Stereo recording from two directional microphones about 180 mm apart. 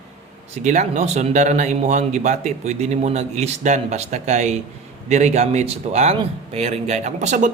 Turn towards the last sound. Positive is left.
turn(degrees=-40)  # may be behind; listen again after turning